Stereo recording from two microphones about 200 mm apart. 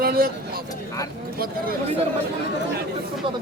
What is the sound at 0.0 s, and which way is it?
Speech, 45° right (ahead or behind).